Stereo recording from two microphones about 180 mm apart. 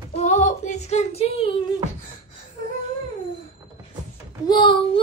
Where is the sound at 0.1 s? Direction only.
40° left (ahead or behind).